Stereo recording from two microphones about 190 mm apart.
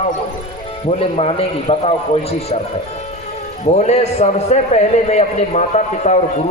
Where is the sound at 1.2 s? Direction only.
30° left (ahead or behind).